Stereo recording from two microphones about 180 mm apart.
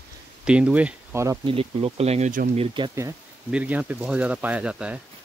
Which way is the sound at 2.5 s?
25° right (ahead or behind).